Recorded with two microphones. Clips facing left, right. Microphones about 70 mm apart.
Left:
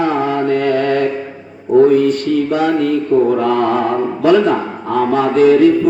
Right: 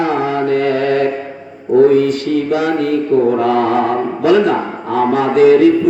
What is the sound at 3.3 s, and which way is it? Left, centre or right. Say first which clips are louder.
Mantra: right 1 dB; centre.